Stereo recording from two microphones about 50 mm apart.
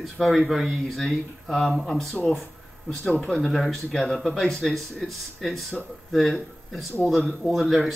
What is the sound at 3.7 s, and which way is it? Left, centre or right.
Speech, centre.